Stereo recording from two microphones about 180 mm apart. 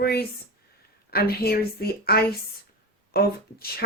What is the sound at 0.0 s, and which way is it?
Speech, 60° left (ahead or behind).